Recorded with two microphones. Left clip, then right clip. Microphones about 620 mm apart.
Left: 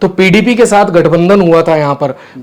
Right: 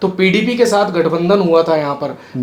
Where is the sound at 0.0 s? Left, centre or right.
Left.